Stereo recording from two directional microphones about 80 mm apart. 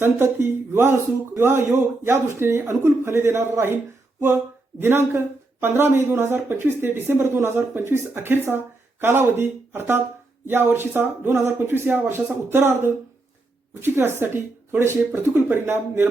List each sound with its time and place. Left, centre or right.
0.0 s speech: right
4.8 s speech: right